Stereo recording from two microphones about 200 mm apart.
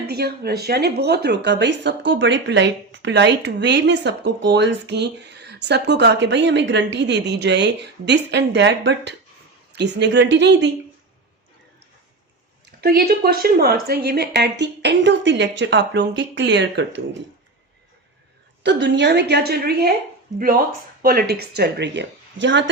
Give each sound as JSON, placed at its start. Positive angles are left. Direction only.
{"t": 0.1, "sound": "speech", "side_deg": -50}
{"t": 12.8, "sound": "speech", "side_deg": -50}
{"t": 18.6, "sound": "speech", "side_deg": -60}